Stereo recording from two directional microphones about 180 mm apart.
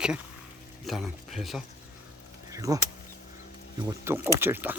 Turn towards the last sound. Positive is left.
turn(degrees=-10)  # may be behind; listen again after turning